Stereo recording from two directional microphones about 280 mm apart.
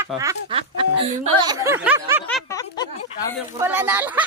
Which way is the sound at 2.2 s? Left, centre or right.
Centre.